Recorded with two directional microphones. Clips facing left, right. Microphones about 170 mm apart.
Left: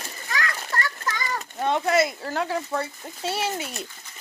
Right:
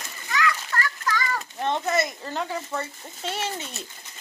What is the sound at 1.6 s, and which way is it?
Speech, 10° left (ahead or behind).